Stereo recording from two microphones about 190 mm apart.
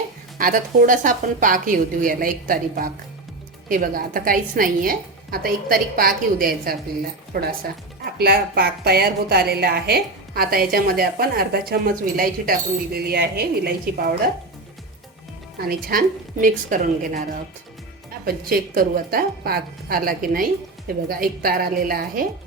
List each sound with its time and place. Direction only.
0.3 s a woman's voice: 45° right (ahead or behind)
15.6 s a woman's voice: 50° right (ahead or behind)
18.3 s a woman's voice: 50° right (ahead or behind)